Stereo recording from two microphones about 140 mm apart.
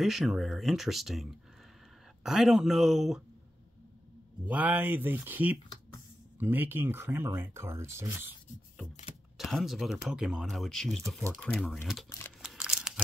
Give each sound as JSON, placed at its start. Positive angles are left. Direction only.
{"t": 0.0, "sound": "speech", "side_deg": 0}
{"t": 4.5, "sound": "speech", "side_deg": -10}
{"t": 9.4, "sound": "speech", "side_deg": 0}
{"t": 11.5, "sound": "speech", "side_deg": 15}
{"t": 12.4, "sound": "crumpling", "side_deg": -5}